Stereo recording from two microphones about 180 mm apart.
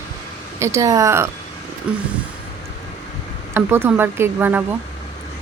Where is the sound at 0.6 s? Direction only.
15° right (ahead or behind).